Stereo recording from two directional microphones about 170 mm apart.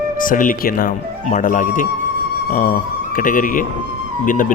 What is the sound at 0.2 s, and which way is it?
Speech, 55° left (ahead or behind).